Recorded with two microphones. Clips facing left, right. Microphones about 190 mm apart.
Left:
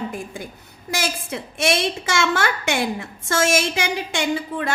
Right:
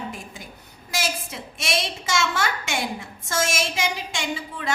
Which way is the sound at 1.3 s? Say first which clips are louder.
Left 7 dB; 60° left (ahead or behind).